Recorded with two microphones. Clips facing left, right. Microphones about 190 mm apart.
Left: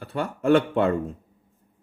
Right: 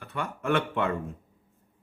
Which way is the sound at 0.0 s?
35° left (ahead or behind).